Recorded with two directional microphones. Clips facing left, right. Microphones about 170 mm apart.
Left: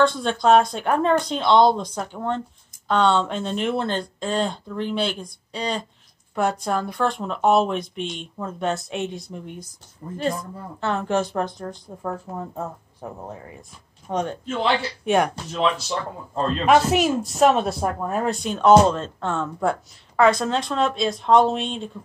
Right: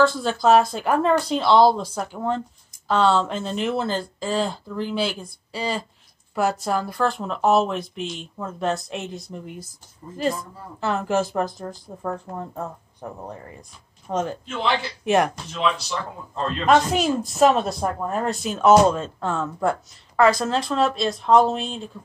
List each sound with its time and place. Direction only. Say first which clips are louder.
0.0 s speech: even; centre (ahead or behind)
10.8 s speech: even; 5° right (ahead or behind)
15.5 s speech: left 3 dB; 35° left (ahead or behind)
16.6 s speech: left 1 dB; 5° left (ahead or behind)